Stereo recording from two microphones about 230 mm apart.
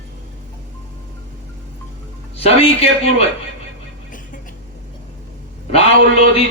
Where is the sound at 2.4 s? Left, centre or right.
Left.